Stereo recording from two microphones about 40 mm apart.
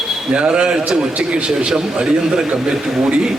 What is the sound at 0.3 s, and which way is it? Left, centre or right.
A man's voice, right.